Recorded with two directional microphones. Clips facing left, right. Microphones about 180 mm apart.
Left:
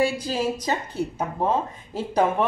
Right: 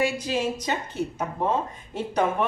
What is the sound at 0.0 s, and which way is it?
Speech, 30° left (ahead or behind).